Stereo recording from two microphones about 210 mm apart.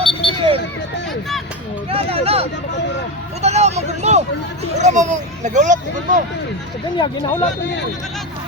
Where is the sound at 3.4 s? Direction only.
30° right (ahead or behind).